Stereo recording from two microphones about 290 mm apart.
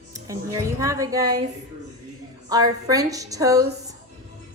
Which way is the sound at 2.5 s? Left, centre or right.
Centre.